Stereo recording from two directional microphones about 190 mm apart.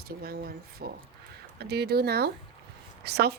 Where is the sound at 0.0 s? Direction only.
55° right (ahead or behind).